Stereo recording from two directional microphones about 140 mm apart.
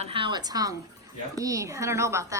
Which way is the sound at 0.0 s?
40° right (ahead or behind).